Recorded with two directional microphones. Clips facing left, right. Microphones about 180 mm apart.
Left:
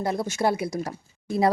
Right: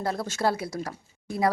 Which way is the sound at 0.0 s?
15° left (ahead or behind).